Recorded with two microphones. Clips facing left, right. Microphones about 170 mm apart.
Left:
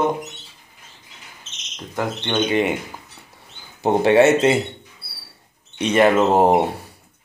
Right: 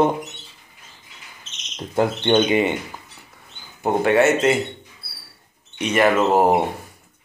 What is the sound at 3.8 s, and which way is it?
Speech, 25° left (ahead or behind).